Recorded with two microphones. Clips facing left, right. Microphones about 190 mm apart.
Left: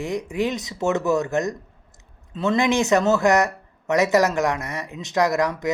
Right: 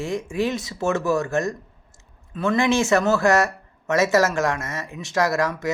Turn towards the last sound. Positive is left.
turn(degrees=20)  # may be behind; listen again after turning